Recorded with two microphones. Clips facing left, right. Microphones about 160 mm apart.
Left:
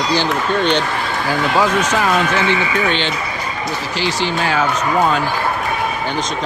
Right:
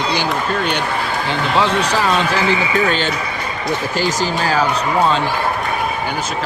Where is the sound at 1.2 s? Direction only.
25° right (ahead or behind).